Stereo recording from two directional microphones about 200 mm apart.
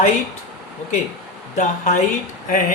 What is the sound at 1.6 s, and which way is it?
Speech, 40° left (ahead or behind).